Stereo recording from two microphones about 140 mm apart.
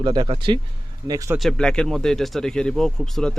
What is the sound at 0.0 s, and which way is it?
Speech, 35° right (ahead or behind).